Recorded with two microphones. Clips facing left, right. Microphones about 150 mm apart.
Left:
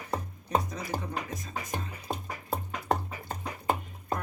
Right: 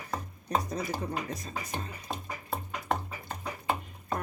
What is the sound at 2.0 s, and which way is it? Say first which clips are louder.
Music: left 2 dB; 40° left (ahead or behind).